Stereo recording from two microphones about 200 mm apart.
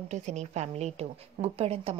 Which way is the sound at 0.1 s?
35° right (ahead or behind).